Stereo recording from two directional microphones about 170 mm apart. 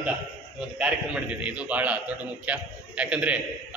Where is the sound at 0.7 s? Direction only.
5° right (ahead or behind).